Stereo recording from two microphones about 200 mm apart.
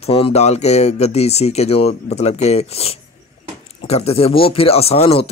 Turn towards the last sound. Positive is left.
turn(degrees=30)  # may be behind; listen again after turning